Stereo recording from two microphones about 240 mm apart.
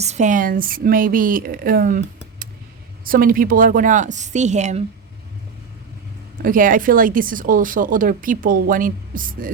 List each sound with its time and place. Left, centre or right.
0.0 s speech: right
6.4 s speech: right